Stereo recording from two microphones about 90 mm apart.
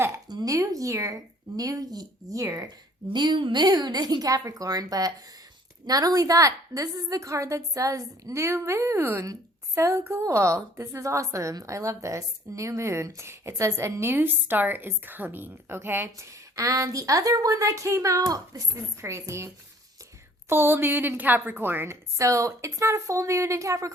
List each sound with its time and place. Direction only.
0.3 s a woman's voice: 50° right (ahead or behind)
0.5 s a woman's voice: 40° right (ahead or behind)
3.1 s a woman's voice: 55° right (ahead or behind); by 19.5 s 30° right (ahead or behind)
20.5 s a woman's voice: 25° right (ahead or behind)